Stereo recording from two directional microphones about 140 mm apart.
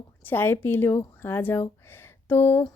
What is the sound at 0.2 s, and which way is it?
A woman's voice, 15° left (ahead or behind).